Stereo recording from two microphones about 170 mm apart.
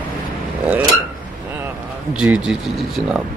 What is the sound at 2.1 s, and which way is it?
Speech, 5° right (ahead or behind).